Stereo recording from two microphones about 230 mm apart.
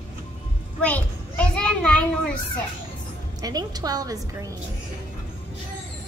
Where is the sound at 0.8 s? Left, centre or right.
Centre.